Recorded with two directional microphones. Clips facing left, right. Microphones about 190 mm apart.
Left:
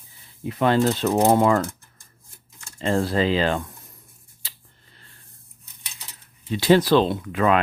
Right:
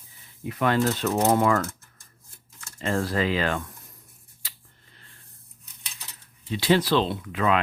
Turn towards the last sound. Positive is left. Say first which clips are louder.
# left 4 dB
turn(degrees=45)  # may be behind; listen again after turning